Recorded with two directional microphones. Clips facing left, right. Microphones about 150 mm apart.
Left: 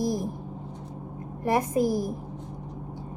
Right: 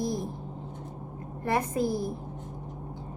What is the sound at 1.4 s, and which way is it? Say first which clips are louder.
Speech: left 4 dB; 15° left (ahead or behind).